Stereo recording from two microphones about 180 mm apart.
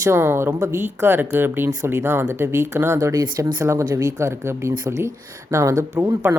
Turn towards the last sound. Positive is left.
turn(degrees=-15)  # may be behind; listen again after turning